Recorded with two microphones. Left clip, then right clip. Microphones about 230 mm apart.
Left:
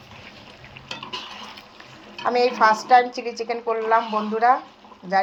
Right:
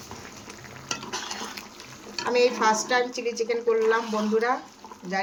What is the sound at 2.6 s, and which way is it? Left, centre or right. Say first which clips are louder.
Speech: left 7 dB; centre.